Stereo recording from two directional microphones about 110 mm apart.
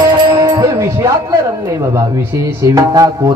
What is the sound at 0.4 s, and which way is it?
Music, 30° right (ahead or behind).